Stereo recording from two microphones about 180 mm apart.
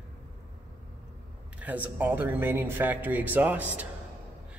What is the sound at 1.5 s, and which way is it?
Speech, 10° right (ahead or behind).